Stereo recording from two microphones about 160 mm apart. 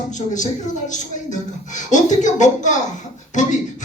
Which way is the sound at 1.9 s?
50° left (ahead or behind).